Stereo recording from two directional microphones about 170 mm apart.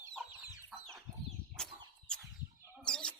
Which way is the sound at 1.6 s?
5° left (ahead or behind).